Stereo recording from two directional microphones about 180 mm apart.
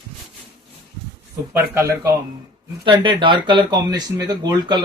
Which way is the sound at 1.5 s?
15° right (ahead or behind).